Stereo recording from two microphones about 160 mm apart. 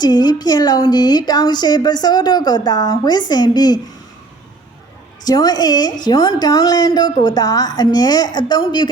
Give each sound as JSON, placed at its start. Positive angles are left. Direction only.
{"t": 0.0, "sound": "a woman's voice", "side_deg": 25}
{"t": 5.2, "sound": "a woman's voice", "side_deg": 25}